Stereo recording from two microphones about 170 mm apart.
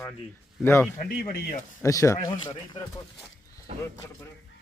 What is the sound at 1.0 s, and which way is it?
Speech, 55° left (ahead or behind).